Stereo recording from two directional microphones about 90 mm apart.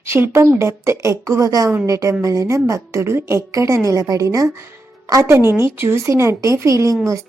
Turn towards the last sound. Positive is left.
turn(degrees=-35)  # may be behind; listen again after turning